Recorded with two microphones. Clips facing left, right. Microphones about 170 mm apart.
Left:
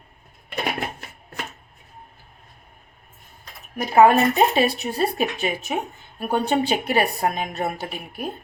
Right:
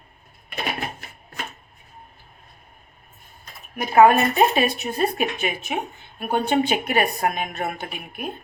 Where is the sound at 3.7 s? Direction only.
25° left (ahead or behind).